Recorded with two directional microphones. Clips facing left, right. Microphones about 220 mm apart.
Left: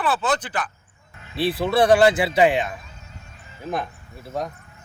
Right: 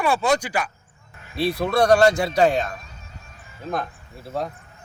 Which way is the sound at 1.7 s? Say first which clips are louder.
Left 1 dB; 5° left (ahead or behind).